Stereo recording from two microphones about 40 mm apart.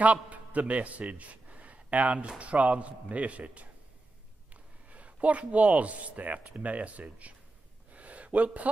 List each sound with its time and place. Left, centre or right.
0.0 s a man's voice: right
4.8 s speech: right
7.9 s a sound: right